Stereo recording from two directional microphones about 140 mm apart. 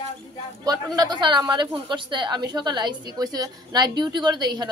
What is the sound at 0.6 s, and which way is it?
A woman's voice, 30° right (ahead or behind).